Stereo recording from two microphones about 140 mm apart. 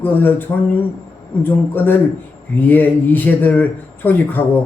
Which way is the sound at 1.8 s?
15° left (ahead or behind).